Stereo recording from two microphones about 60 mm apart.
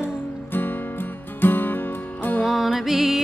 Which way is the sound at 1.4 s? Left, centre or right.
Left.